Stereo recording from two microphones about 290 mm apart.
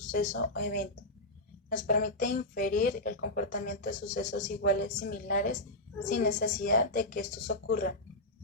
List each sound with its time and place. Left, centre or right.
0.1 s a woman's voice: left